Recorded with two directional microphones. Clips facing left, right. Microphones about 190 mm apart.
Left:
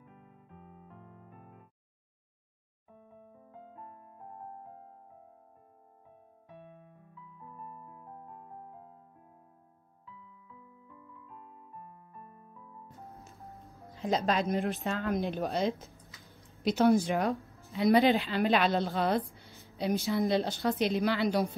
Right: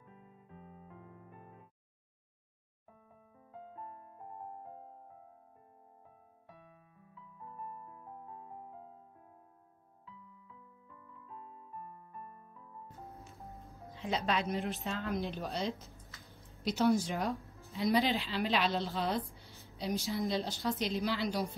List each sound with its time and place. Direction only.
13.9 s speech: 45° left (ahead or behind)
16.3 s a sound: centre (ahead or behind)
16.6 s speech: 55° left (ahead or behind)